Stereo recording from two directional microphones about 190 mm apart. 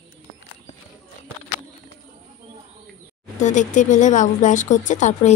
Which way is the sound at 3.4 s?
40° left (ahead or behind).